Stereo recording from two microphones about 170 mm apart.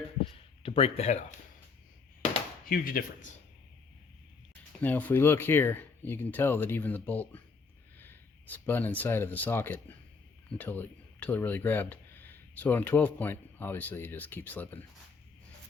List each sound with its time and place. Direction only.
0.6 s speech: 35° left (ahead or behind)
2.6 s speech: 55° left (ahead or behind)
4.8 s speech: 10° left (ahead or behind)